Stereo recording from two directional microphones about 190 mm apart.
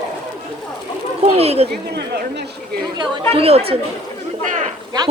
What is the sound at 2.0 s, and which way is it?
Speech, 60° right (ahead or behind).